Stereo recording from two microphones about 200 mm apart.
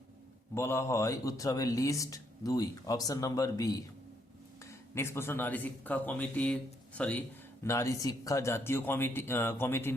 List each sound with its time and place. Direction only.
0.5 s speech: 15° left (ahead or behind)